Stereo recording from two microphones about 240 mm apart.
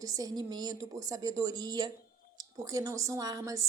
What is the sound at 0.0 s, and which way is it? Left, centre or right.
A woman's voice, centre.